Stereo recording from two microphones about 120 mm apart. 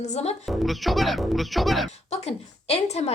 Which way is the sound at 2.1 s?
65° left (ahead or behind).